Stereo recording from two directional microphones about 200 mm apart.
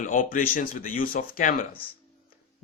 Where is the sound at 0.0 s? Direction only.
40° left (ahead or behind).